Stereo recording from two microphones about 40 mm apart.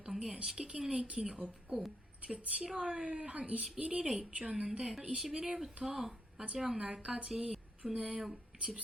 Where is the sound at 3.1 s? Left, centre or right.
Right.